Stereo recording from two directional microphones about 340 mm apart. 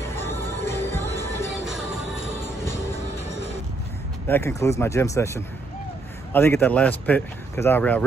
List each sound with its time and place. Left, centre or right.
0.1 s music: centre
4.3 s speech: centre